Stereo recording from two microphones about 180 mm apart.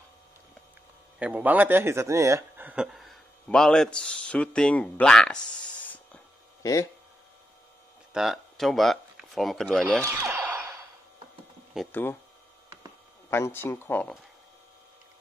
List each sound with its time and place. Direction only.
1.2 s speech: 10° right (ahead or behind)
6.6 s speech: 20° left (ahead or behind)
8.1 s speech: centre (ahead or behind)
10.0 s a sound: 15° right (ahead or behind)
11.9 s speech: 10° left (ahead or behind)
13.3 s speech: 10° left (ahead or behind)